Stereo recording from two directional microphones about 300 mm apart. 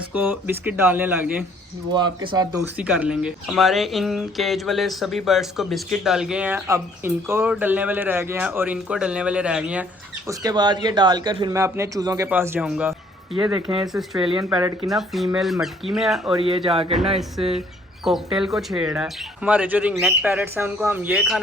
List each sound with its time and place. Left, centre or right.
0.1 s speech: centre
13.8 s speech: centre
14.5 s speech: centre
14.8 s speech: centre
16.3 s speech: centre
18.0 s speech: centre